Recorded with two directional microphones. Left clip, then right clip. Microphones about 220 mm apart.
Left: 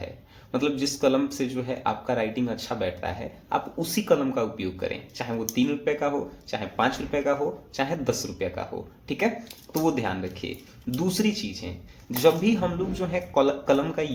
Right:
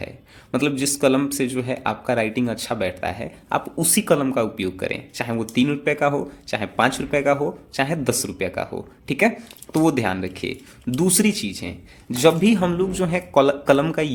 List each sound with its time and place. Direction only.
0.5 s speech: 50° right (ahead or behind)